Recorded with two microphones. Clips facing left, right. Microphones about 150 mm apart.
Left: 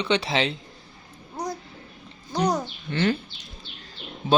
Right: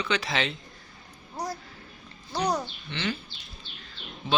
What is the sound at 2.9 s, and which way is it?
Speech, 50° left (ahead or behind).